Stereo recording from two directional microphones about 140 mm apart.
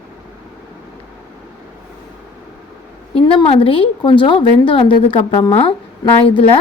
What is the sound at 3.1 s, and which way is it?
A woman's voice, 40° left (ahead or behind).